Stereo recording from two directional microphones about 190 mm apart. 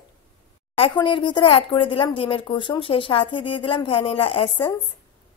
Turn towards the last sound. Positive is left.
turn(degrees=30)  # may be behind; listen again after turning